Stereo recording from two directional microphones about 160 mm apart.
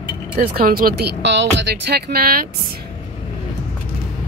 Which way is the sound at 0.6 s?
65° right (ahead or behind).